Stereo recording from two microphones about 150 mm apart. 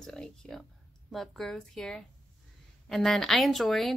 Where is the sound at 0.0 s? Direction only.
5° left (ahead or behind).